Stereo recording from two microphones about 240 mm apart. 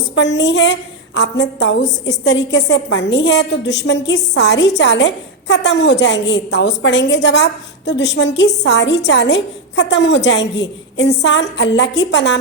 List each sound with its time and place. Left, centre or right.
0.2 s a woman's voice: left